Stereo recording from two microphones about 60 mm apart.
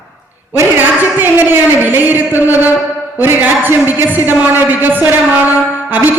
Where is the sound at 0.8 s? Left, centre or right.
Right.